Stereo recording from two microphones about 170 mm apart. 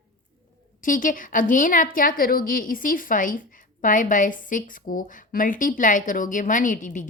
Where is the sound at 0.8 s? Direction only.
50° left (ahead or behind).